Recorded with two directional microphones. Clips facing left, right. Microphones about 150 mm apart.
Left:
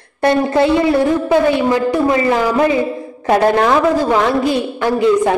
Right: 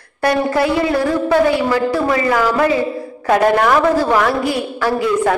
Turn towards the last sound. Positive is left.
turn(degrees=20)  # may be behind; listen again after turning